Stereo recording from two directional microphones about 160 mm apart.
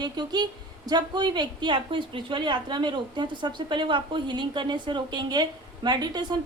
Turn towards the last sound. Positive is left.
turn(degrees=-25)  # may be behind; listen again after turning